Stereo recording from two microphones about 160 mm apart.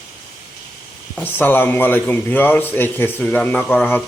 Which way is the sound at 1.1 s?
10° left (ahead or behind).